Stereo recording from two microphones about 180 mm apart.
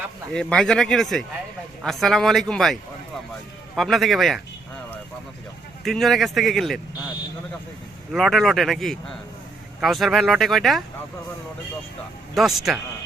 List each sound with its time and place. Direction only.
0.3 s speech: 5° left (ahead or behind)
3.8 s speech: centre (ahead or behind)
5.8 s speech: centre (ahead or behind)
8.1 s speech: centre (ahead or behind)
12.3 s speech: centre (ahead or behind)